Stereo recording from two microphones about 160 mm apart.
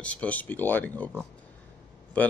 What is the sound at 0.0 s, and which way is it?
Speech, 10° left (ahead or behind).